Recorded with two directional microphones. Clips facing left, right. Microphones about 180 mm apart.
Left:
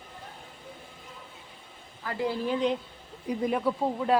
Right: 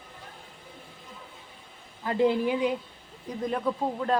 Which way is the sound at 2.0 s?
20° right (ahead or behind).